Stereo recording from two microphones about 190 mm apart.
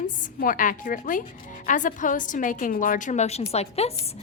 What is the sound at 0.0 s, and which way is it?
A woman's voice, 45° left (ahead or behind).